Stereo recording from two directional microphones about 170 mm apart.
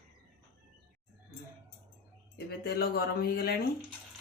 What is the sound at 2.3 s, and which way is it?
Speech, 70° left (ahead or behind).